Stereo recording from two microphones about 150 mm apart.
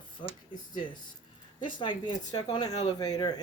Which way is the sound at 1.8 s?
30° left (ahead or behind).